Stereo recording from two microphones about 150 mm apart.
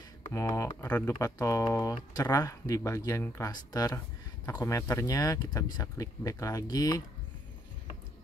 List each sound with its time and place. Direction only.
0.3 s speech: 20° left (ahead or behind)